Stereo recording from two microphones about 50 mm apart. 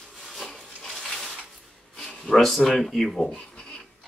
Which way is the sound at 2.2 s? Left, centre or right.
Centre.